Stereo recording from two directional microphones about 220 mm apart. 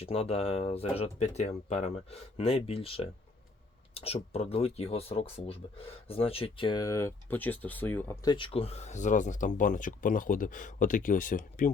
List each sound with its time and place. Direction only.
0.0 s speech: 25° left (ahead or behind)